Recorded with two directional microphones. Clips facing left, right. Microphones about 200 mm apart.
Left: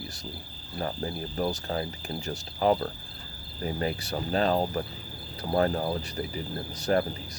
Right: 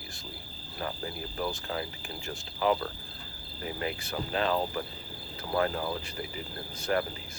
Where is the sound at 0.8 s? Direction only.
35° left (ahead or behind).